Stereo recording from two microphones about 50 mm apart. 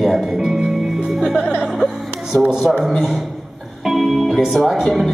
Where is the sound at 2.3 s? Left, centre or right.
Right.